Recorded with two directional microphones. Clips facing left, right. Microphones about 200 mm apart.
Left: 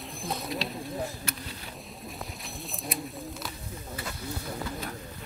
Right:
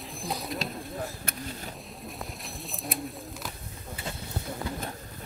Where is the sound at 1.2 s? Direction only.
50° right (ahead or behind).